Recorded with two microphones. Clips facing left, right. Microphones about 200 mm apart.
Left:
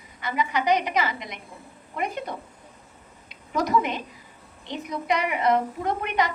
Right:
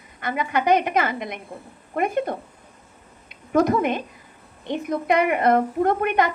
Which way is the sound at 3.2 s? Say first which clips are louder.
Right 8 dB; 55° right (ahead or behind).